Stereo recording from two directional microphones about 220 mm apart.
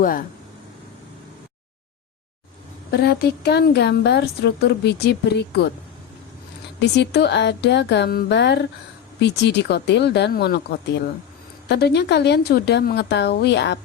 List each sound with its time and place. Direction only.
0.0 s speech: 40° left (ahead or behind)
2.9 s a woman's voice: 50° left (ahead or behind)
6.7 s a woman's voice: 50° left (ahead or behind)